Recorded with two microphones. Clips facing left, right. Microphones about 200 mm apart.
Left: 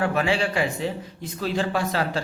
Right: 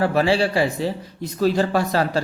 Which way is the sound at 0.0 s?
35° right (ahead or behind).